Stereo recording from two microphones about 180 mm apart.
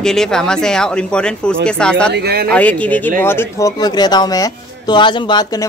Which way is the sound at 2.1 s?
60° right (ahead or behind).